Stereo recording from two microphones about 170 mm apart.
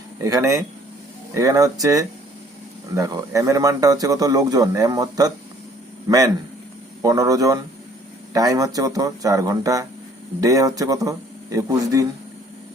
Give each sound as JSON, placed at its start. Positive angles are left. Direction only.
{"t": 0.2, "sound": "speech", "side_deg": -20}